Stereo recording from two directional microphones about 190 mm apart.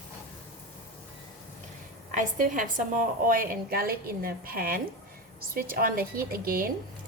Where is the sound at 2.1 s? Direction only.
45° right (ahead or behind).